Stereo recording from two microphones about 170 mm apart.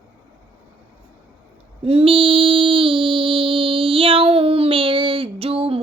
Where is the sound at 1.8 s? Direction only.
35° right (ahead or behind).